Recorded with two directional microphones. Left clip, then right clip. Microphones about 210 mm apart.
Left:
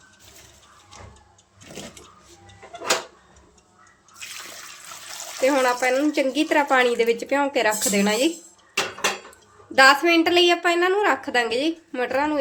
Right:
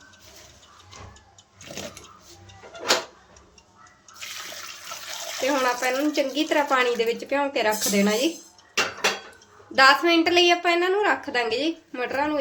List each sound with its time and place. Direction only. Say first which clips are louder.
5.4 s speech: left 4 dB; 20° left (ahead or behind)
9.7 s speech: left 2 dB; 20° left (ahead or behind)